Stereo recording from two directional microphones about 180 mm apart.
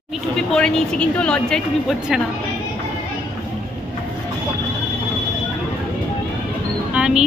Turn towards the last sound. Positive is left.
turn(degrees=-5)  # may be behind; listen again after turning